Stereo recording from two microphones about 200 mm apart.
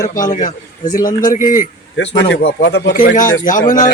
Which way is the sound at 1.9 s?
65° left (ahead or behind).